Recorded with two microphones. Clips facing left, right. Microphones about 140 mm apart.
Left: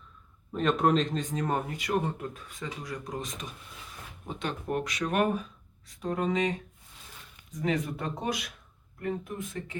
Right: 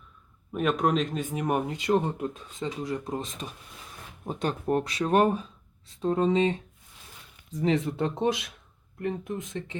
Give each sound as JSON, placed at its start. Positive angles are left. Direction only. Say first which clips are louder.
{"t": 0.5, "sound": "speech", "louder": "even", "side_deg": -5}
{"t": 4.3, "sound": "speech", "louder": "right 5 dB", "side_deg": -40}